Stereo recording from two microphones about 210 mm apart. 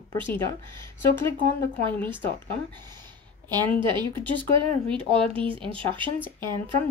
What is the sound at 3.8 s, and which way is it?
Speech, 20° right (ahead or behind).